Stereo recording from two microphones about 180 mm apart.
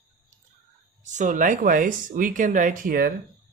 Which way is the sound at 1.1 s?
45° right (ahead or behind).